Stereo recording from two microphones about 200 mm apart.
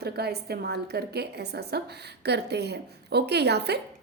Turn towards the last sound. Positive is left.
turn(degrees=-55)  # may be behind; listen again after turning